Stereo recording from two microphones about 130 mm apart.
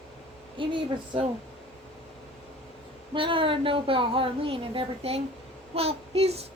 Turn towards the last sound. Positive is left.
turn(degrees=-50)  # may be behind; listen again after turning